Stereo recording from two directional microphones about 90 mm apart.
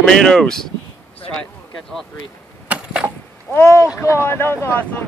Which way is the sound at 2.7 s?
15° right (ahead or behind).